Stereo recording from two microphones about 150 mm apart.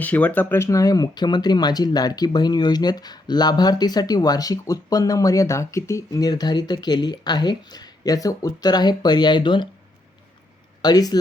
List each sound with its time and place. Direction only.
0.0 s speech: 10° left (ahead or behind); by 9.6 s 30° left (ahead or behind)
10.8 s speech: 25° left (ahead or behind)